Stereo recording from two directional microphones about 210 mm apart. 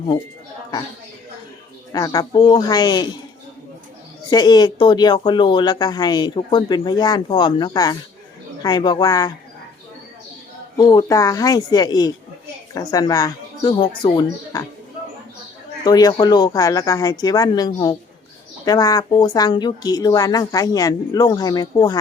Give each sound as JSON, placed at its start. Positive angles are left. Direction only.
{"t": 1.9, "sound": "speech", "side_deg": 20}
{"t": 4.3, "sound": "speech", "side_deg": 20}
{"t": 10.8, "sound": "a woman's voice", "side_deg": 20}
{"t": 15.8, "sound": "a woman's voice", "side_deg": 20}